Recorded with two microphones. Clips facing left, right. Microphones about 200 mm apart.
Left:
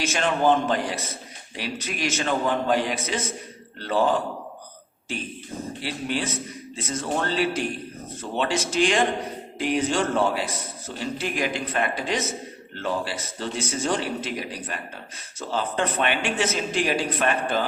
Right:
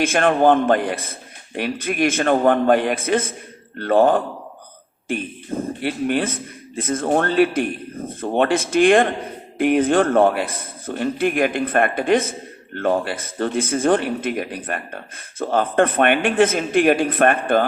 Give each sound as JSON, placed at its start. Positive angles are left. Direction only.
{"t": 0.0, "sound": "a man's voice", "side_deg": -55}